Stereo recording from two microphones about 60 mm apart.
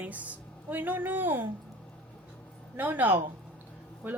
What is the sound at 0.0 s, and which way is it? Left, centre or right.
A woman's voice, right.